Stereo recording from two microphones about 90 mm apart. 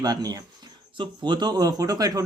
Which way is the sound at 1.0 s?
55° right (ahead or behind).